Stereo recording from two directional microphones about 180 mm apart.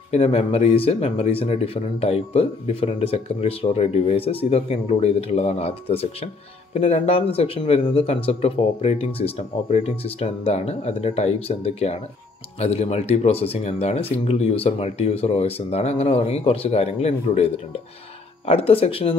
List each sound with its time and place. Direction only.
0.1 s speech: 35° left (ahead or behind)